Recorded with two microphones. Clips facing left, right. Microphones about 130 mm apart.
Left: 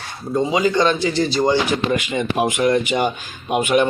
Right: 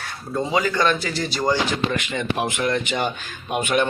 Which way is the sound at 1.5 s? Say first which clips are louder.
Left 4 dB; 15° left (ahead or behind).